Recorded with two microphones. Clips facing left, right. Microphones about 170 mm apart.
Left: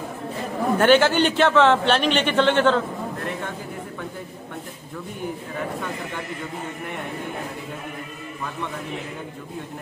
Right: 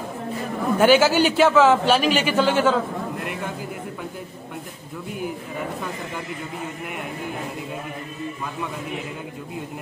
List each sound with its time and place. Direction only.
0.7 s a man's voice: 5° right (ahead or behind)